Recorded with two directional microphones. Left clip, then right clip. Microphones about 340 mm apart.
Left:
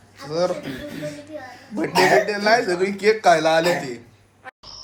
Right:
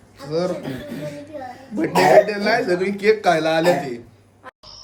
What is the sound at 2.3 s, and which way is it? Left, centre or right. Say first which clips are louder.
Speech: left 1 dB; centre.